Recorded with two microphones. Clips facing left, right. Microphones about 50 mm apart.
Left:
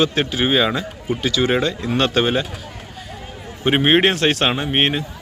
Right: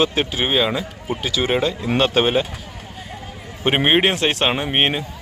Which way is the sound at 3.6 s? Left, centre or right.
Centre.